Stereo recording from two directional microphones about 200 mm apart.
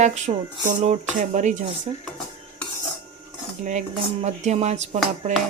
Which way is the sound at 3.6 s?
35° right (ahead or behind).